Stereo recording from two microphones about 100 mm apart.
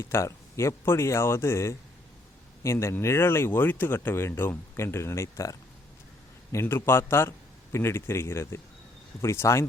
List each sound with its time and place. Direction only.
0.0 s speech: 25° left (ahead or behind)